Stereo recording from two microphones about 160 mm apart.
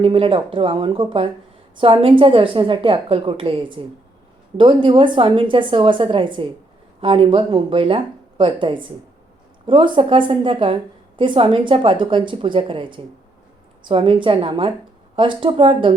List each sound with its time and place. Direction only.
0.0 s a woman's voice: 35° right (ahead or behind)